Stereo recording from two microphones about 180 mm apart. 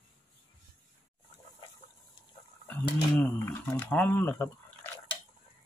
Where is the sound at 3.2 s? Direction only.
10° left (ahead or behind).